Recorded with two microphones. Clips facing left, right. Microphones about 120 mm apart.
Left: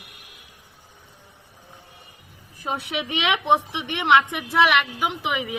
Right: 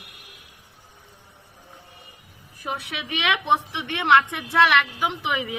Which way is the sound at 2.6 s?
25° left (ahead or behind).